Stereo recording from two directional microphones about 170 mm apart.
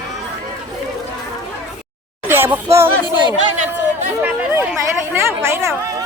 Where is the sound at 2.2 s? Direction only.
15° right (ahead or behind).